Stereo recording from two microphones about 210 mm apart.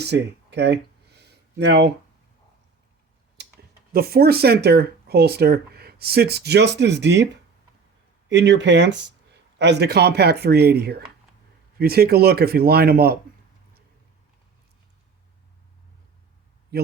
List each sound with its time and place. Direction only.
0.0 s a sound: 55° right (ahead or behind)
3.4 s computer keyboard: 50° right (ahead or behind)
3.9 s speech: 45° right (ahead or behind)
8.3 s speech: 55° right (ahead or behind)
16.7 s speech: 50° right (ahead or behind)